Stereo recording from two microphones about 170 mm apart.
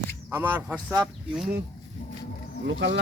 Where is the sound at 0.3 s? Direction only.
10° right (ahead or behind).